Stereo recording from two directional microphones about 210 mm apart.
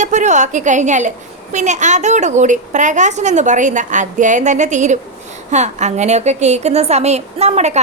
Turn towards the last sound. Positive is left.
turn(degrees=-30)  # may be behind; listen again after turning